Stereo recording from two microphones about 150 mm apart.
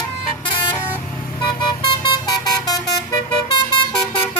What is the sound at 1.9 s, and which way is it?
Vehicle, 25° left (ahead or behind).